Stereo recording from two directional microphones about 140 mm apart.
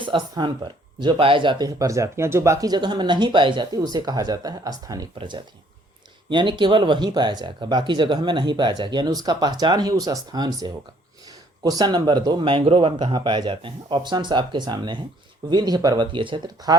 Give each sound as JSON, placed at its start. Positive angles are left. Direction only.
{"t": 0.0, "sound": "speech", "side_deg": -35}